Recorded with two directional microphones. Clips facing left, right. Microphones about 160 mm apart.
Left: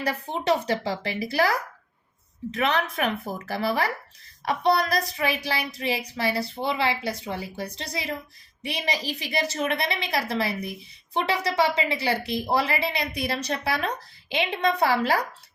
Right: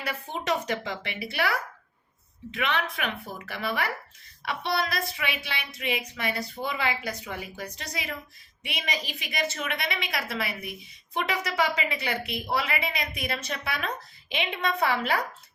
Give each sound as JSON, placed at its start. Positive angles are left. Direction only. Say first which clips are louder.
{"t": 0.0, "sound": "a woman's voice", "louder": "left 5 dB", "side_deg": 35}